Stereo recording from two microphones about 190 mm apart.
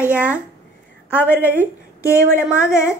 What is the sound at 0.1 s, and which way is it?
Speech, 5° right (ahead or behind).